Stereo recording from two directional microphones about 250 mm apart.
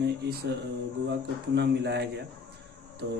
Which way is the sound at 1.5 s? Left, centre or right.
Right.